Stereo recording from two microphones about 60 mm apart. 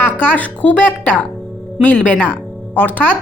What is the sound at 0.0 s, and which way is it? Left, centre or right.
A woman's voice, left.